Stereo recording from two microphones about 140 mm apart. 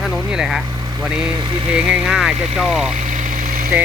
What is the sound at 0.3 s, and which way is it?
Speech, centre (ahead or behind).